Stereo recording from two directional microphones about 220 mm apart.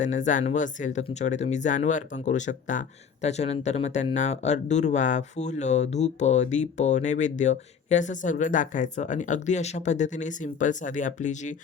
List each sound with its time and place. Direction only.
0.0 s speech: 35° left (ahead or behind)